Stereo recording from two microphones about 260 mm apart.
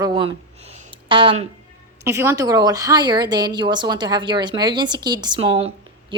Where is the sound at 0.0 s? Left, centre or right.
Centre.